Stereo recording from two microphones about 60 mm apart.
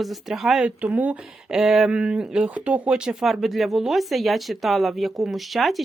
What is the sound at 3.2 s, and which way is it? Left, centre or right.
Speech, centre.